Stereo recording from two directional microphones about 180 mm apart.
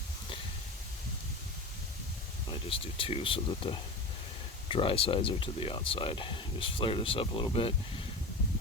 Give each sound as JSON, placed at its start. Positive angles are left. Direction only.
{"t": 2.5, "sound": "speech", "side_deg": 30}